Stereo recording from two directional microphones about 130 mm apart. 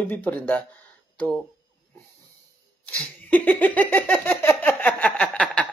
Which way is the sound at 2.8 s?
10° left (ahead or behind).